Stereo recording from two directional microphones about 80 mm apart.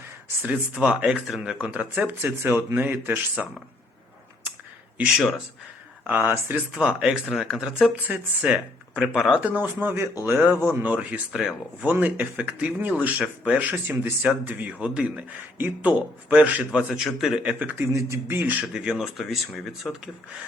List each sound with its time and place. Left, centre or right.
0.4 s speech: centre
3.4 s speech: centre
6.1 s speech: right
6.7 s speech: centre
8.0 s speech: centre
9.6 s speech: right
11.3 s speech: centre
11.8 s speech: centre
15.5 s speech: right
16.7 s speech: centre
17.6 s speech: right
17.9 s beatboxing: right
18.6 s speech: centre